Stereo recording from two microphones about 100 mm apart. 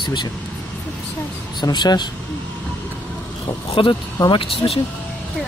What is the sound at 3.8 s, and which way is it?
Speech, 55° left (ahead or behind).